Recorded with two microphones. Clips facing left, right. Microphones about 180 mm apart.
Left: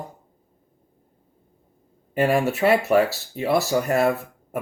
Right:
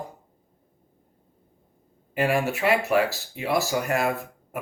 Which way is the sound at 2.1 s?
40° left (ahead or behind).